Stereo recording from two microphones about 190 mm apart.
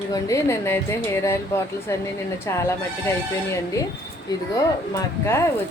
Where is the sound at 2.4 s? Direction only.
15° left (ahead or behind).